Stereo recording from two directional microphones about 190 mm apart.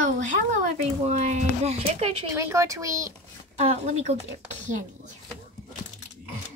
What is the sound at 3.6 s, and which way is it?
Speech, 35° right (ahead or behind).